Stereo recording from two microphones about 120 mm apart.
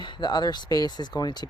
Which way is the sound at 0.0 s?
40° left (ahead or behind).